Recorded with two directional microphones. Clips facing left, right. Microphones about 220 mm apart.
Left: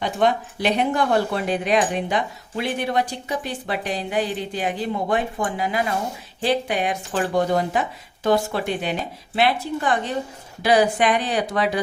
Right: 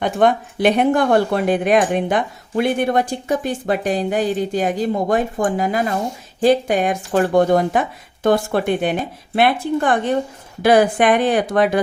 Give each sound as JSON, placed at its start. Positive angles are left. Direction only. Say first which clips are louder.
{"t": 0.0, "sound": "speech", "louder": "right 4 dB", "side_deg": -55}